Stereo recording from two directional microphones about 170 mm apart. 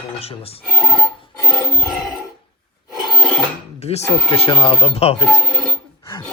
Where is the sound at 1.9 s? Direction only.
Centre (ahead or behind).